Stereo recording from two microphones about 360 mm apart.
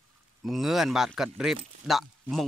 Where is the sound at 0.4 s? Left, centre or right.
Centre.